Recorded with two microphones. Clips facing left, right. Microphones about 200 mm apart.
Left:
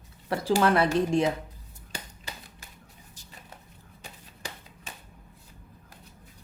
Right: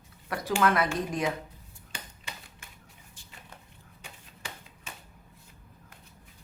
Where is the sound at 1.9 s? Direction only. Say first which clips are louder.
Left 3 dB; 35° left (ahead or behind).